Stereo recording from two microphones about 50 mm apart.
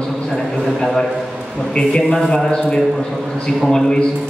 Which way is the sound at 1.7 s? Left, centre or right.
Centre.